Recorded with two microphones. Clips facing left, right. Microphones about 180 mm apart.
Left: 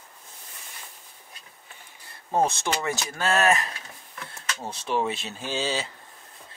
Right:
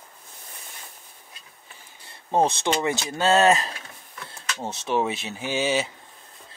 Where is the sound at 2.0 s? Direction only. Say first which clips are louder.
Right 2 dB; 25° right (ahead or behind).